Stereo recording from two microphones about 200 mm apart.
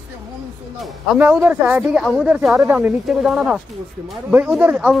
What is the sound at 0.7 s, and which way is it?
Speech, 5° right (ahead or behind).